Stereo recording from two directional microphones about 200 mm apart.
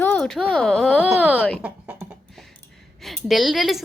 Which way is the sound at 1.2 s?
10° right (ahead or behind).